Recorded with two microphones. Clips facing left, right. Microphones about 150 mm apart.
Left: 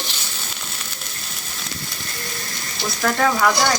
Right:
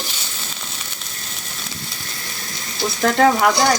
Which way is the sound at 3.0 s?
25° right (ahead or behind).